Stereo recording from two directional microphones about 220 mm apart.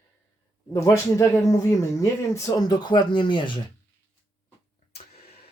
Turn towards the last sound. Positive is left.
turn(degrees=45)  # may be behind; listen again after turning